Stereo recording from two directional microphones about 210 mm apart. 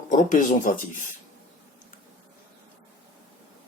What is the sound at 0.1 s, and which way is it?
Speech, 40° left (ahead or behind).